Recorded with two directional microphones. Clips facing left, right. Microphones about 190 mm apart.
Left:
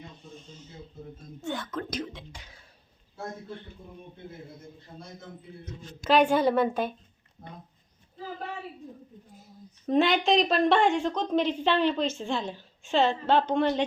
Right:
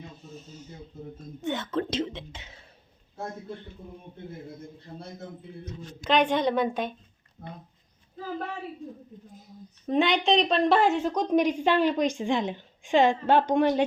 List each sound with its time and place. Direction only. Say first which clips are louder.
0.3 s a sound: right 3 dB; 5° right (ahead or behind)
1.4 s whispering: right 4 dB; 20° right (ahead or behind)
6.0 s a woman's voice: left 2 dB; 5° left (ahead or behind)
9.8 s a woman's voice: even; centre (ahead or behind)